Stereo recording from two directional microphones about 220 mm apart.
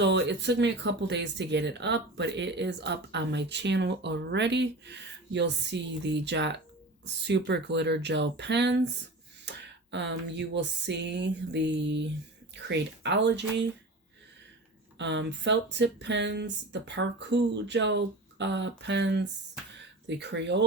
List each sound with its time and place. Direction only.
0.0 s speech: 50° right (ahead or behind)
14.9 s speech: 55° right (ahead or behind)